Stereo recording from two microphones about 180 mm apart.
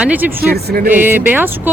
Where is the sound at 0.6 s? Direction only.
60° right (ahead or behind).